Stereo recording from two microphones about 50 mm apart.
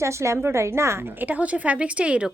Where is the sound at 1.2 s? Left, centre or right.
Right.